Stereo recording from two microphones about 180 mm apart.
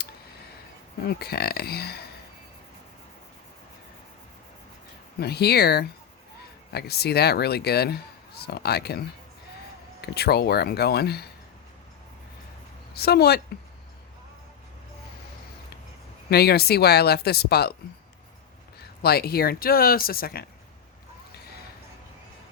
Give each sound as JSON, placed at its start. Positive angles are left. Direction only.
{"t": 1.0, "sound": "speech", "side_deg": 60}
{"t": 5.2, "sound": "speech", "side_deg": 65}
{"t": 10.0, "sound": "speech", "side_deg": 65}
{"t": 12.9, "sound": "speech", "side_deg": 60}
{"t": 16.3, "sound": "speech", "side_deg": 65}
{"t": 19.0, "sound": "speech", "side_deg": 60}